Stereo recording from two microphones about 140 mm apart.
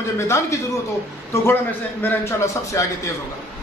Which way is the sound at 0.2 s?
20° left (ahead or behind).